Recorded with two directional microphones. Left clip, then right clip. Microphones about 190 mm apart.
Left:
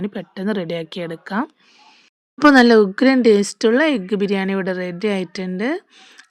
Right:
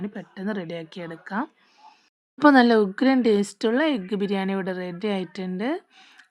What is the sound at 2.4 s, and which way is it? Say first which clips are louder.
Speech: left 5 dB; 10° left (ahead or behind).